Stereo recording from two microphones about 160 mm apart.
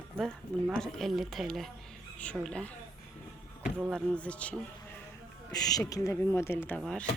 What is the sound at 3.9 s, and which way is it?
Speech, 10° left (ahead or behind).